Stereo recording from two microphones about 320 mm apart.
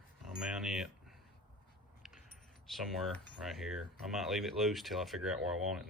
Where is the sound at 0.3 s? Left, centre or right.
Centre.